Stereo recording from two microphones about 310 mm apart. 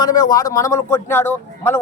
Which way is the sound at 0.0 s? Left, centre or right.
Centre.